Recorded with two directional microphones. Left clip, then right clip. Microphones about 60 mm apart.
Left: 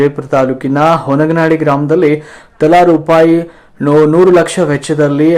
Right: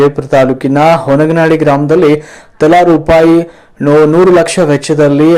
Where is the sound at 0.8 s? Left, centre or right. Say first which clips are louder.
Right 3 dB; right.